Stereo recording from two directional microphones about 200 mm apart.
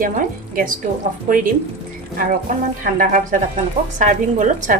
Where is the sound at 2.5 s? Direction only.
40° right (ahead or behind).